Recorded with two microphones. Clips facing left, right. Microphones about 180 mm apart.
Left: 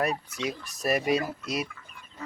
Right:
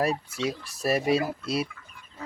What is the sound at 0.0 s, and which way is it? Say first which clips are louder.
Speech: right 2 dB; 30° right (ahead or behind).